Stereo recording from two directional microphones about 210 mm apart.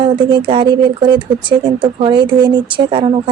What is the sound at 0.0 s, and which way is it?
Speech, 25° right (ahead or behind).